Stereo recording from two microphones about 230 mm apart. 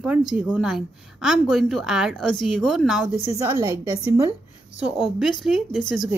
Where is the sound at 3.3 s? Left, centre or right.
Centre.